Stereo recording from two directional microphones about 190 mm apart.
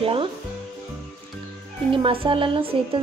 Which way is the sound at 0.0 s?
30° right (ahead or behind).